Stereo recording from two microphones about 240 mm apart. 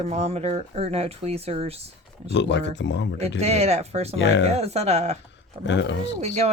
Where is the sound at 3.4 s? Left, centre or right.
Right.